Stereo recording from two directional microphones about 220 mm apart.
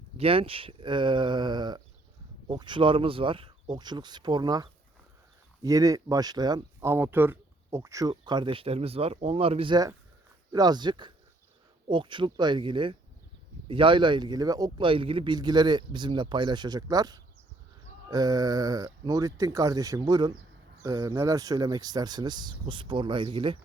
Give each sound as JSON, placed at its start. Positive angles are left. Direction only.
{"t": 0.2, "sound": "speech", "side_deg": -25}